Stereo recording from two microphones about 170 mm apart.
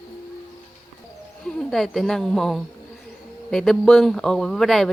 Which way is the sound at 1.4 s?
5° left (ahead or behind).